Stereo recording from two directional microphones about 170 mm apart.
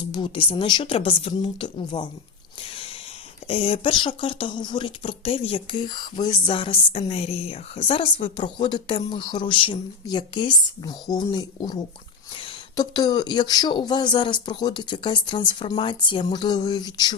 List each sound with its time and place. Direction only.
0.1 s speech: 30° left (ahead or behind)
3.4 s speech: 35° left (ahead or behind)